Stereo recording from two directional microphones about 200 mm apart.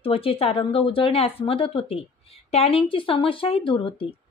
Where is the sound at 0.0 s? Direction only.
30° left (ahead or behind).